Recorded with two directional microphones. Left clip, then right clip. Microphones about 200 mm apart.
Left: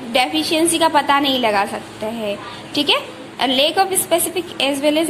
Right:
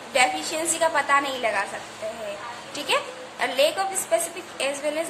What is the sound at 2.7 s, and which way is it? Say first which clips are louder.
A woman's voice: left 8 dB; 20° left (ahead or behind).